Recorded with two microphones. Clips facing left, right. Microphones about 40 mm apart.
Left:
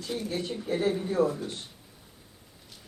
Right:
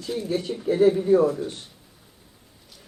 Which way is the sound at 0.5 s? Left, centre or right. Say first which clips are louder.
Right 10 dB; centre.